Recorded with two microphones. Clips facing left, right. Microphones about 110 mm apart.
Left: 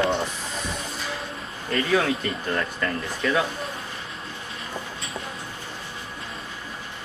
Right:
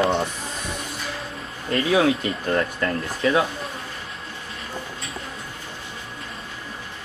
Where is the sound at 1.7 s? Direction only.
10° right (ahead or behind).